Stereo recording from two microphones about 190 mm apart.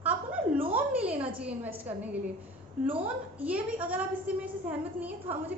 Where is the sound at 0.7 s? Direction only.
5° right (ahead or behind).